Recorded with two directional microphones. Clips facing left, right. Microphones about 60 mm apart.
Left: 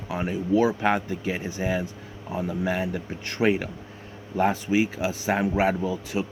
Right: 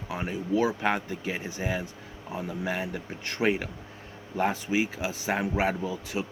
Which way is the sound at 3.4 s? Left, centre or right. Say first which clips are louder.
Left 4 dB; centre.